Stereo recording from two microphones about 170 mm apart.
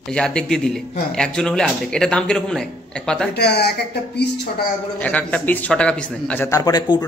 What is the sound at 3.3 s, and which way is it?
Speech, 75° left (ahead or behind).